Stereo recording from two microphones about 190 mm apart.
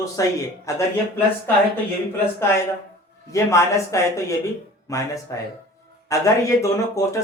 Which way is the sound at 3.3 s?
15° left (ahead or behind).